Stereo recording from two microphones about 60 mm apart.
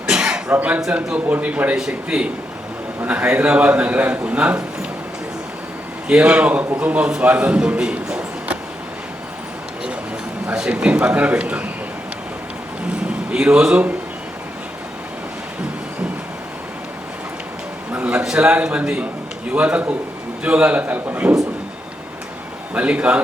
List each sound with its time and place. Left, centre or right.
0.1 s a sound: centre
0.5 s a man's voice: right
6.1 s a man's voice: centre
10.5 s a man's voice: centre
13.1 s a sound: centre
17.9 s a sound: centre
18.3 s a man's voice: centre
20.8 s a man's voice: right
22.7 s a man's voice: right